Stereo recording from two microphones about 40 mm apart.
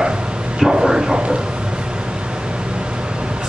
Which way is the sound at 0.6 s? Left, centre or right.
Centre.